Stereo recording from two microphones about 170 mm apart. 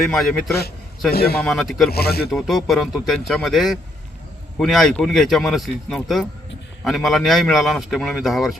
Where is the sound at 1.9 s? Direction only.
65° left (ahead or behind).